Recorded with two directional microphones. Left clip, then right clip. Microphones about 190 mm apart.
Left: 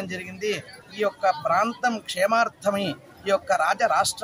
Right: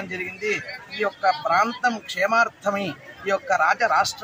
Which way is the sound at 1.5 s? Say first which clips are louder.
Right 2 dB; 35° left (ahead or behind).